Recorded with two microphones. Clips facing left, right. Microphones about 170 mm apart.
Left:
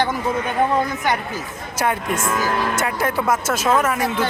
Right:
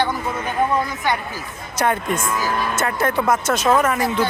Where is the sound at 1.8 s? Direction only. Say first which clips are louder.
Right 1 dB; 5° left (ahead or behind).